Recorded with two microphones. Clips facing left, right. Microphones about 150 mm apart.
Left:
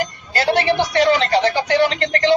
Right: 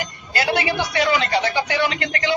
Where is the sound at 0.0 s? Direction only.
35° left (ahead or behind).